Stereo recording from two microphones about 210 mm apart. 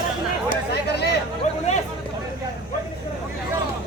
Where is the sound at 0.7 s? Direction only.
55° left (ahead or behind).